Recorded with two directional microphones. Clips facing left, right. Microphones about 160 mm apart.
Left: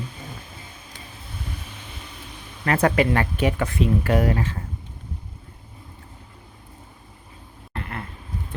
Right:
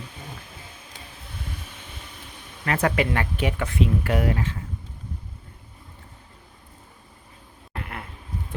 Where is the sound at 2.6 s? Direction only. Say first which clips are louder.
Left 4 dB; 40° left (ahead or behind).